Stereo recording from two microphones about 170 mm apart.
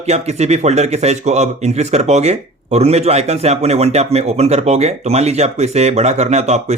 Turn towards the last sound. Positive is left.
turn(degrees=-40)  # may be behind; listen again after turning